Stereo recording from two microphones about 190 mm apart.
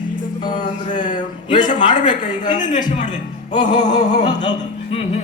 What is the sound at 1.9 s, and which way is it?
Speech, 40° left (ahead or behind).